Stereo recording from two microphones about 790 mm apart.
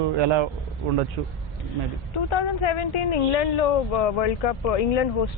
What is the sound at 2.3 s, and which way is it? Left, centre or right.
Speech, left.